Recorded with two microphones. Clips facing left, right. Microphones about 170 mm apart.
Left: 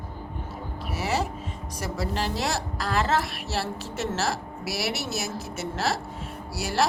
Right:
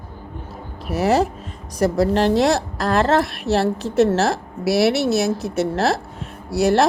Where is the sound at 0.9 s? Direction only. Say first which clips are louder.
Right 10 dB; 40° right (ahead or behind).